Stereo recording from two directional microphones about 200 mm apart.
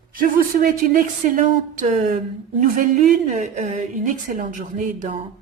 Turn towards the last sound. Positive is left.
turn(degrees=-40)  # may be behind; listen again after turning